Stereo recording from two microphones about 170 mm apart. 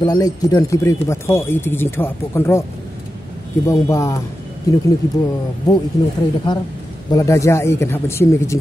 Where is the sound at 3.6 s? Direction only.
20° left (ahead or behind).